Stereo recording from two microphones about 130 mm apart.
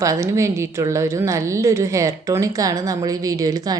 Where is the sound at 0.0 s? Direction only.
25° right (ahead or behind).